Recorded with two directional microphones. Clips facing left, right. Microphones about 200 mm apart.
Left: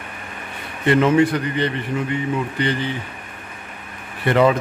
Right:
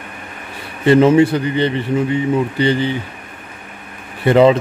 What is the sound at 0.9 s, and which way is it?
A man's voice, 30° right (ahead or behind).